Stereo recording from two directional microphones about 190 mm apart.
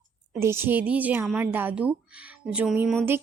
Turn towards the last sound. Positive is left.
turn(degrees=0)  # may be behind; listen again after turning